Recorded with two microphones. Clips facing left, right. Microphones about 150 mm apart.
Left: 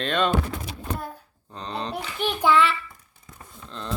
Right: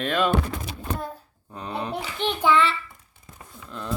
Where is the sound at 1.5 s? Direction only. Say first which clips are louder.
Right 1 dB; 10° right (ahead or behind).